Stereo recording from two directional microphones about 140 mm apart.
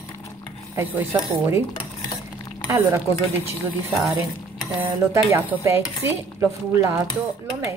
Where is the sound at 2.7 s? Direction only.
20° right (ahead or behind).